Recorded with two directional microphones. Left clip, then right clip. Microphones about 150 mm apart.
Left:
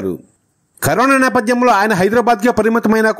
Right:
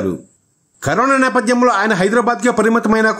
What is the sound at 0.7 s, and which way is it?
A man's voice, 45° left (ahead or behind).